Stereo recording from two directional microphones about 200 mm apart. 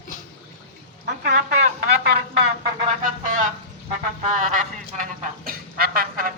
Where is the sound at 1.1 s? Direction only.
45° right (ahead or behind).